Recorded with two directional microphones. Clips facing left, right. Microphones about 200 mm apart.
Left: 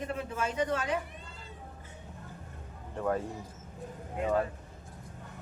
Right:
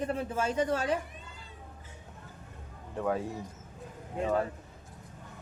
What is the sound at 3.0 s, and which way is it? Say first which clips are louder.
Speech: even; centre (ahead or behind).